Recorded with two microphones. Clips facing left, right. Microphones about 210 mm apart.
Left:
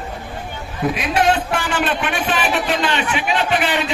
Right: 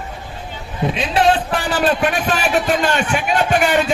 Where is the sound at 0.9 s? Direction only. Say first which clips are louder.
Right 2 dB; 30° right (ahead or behind).